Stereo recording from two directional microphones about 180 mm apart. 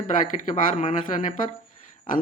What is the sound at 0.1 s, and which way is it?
Speech, 45° left (ahead or behind).